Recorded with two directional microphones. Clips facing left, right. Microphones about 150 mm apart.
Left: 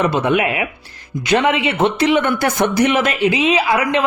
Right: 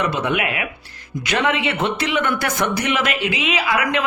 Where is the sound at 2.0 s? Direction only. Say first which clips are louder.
Left 6 dB; 30° left (ahead or behind).